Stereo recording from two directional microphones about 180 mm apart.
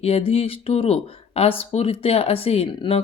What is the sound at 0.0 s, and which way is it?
Speech, 30° left (ahead or behind).